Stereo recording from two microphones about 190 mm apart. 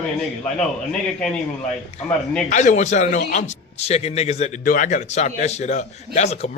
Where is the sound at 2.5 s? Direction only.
40° left (ahead or behind).